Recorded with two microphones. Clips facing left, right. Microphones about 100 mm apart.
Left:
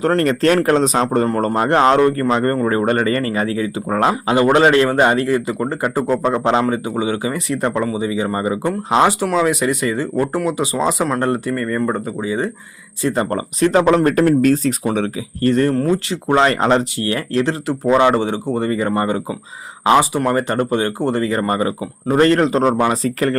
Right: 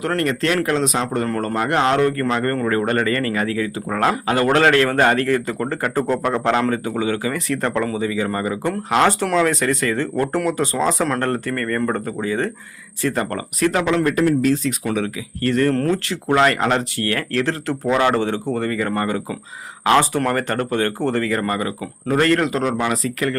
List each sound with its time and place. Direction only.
0.0 s speech: 35° left (ahead or behind)
13.8 s a man's voice: 45° left (ahead or behind)
14.8 s speech: 30° left (ahead or behind)
15.7 s speech: 10° left (ahead or behind); by 23.4 s 35° left (ahead or behind)